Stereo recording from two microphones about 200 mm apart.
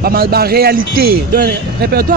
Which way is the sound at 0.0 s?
50° right (ahead or behind).